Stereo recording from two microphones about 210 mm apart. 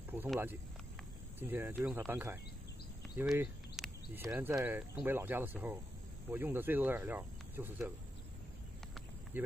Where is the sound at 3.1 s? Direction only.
5° right (ahead or behind).